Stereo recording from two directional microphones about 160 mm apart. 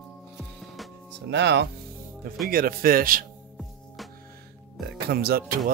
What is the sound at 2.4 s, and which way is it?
Speech, 65° right (ahead or behind).